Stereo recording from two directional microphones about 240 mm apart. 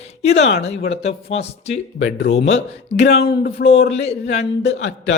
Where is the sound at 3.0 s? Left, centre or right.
Left.